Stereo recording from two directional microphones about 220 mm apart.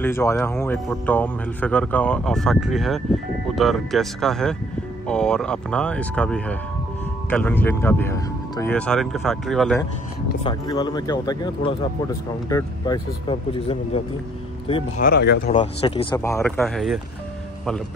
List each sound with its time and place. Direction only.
0.0 s speech: 10° left (ahead or behind)
10.4 s speech: 20° left (ahead or behind)
15.0 s speech: 45° left (ahead or behind)
15.5 s speech: 25° left (ahead or behind)
16.2 s speech: 10° left (ahead or behind)